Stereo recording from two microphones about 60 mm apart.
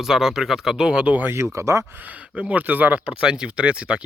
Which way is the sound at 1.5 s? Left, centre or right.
Right.